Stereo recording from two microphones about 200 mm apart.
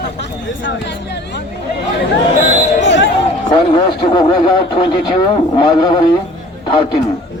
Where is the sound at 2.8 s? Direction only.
60° left (ahead or behind).